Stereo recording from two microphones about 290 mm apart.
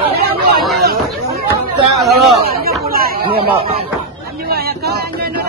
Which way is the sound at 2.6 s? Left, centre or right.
Right.